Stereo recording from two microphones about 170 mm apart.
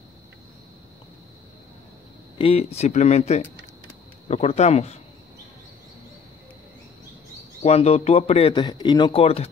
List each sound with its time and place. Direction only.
2.3 s a man's voice: 35° left (ahead or behind)
7.6 s a man's voice: 40° left (ahead or behind)